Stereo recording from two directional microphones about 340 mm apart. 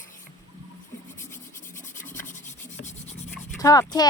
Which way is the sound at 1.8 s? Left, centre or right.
Left.